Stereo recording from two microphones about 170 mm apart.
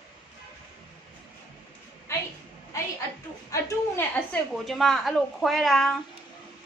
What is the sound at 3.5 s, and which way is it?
Speech, 10° left (ahead or behind).